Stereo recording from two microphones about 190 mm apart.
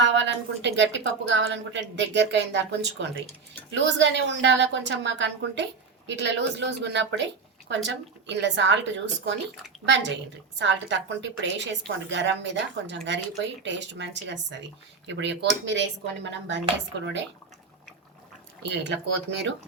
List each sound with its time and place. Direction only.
0.0 s a woman's voice: 75° right (ahead or behind)
18.6 s speech: 65° right (ahead or behind)